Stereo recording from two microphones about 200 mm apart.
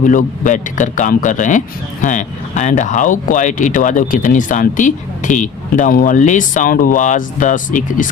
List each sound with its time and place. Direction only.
0.0 s speech: 40° left (ahead or behind)